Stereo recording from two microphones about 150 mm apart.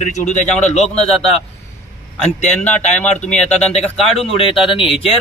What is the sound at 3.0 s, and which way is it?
Speech, 55° left (ahead or behind).